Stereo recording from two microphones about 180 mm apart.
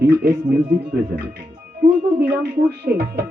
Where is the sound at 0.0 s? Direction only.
60° right (ahead or behind).